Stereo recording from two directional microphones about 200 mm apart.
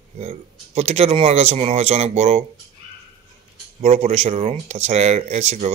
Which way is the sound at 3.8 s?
35° right (ahead or behind).